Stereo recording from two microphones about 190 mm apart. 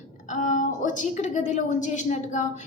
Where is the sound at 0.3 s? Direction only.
40° left (ahead or behind).